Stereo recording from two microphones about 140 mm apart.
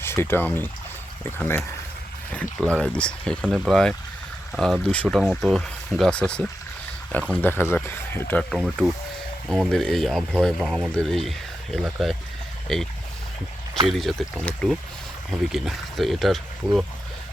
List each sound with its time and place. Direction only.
0.0 s speech: 15° left (ahead or behind)
3.4 s speech: 10° right (ahead or behind)
3.7 s speech: 5° left (ahead or behind)
8.4 s speech: centre (ahead or behind)
14.0 s speech: centre (ahead or behind)